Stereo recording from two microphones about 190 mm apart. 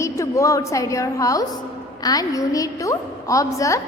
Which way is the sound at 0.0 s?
15° left (ahead or behind).